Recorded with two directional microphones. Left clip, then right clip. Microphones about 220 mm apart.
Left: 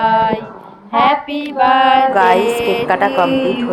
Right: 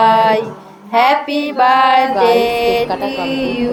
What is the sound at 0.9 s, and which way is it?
Music, 20° right (ahead or behind).